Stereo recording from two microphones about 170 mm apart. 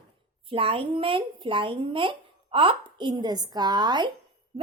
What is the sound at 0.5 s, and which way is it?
A child's voice, 30° right (ahead or behind).